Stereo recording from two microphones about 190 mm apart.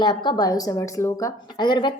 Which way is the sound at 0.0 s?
25° left (ahead or behind).